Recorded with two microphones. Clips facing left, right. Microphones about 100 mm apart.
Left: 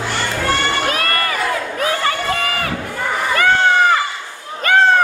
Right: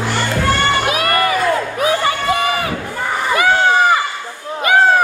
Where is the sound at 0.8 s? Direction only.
10° right (ahead or behind).